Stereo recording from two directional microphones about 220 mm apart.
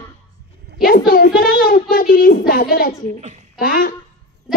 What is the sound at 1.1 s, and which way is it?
Child singing, 40° left (ahead or behind).